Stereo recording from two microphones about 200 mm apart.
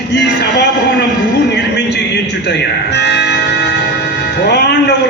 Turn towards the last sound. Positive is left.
turn(degrees=55)  # may be behind; listen again after turning